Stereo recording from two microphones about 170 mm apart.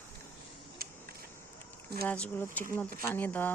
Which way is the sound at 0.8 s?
60° right (ahead or behind).